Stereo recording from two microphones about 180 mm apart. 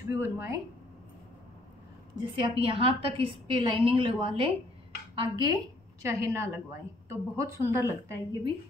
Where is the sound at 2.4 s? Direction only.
30° right (ahead or behind).